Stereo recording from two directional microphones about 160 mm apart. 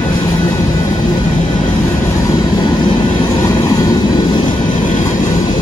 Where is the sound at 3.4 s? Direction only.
20° left (ahead or behind).